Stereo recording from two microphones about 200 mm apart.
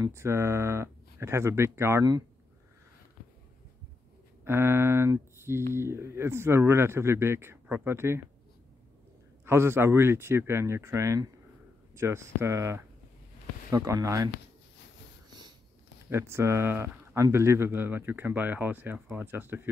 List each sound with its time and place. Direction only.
0.0 s speech: 15° right (ahead or behind)
4.5 s speech: 10° right (ahead or behind)
9.4 s speech: 10° right (ahead or behind)
16.1 s speech: 15° right (ahead or behind)